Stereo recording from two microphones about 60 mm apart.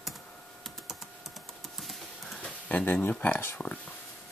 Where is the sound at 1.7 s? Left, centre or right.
Centre.